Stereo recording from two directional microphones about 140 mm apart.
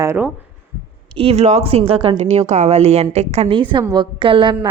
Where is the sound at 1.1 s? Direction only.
45° right (ahead or behind).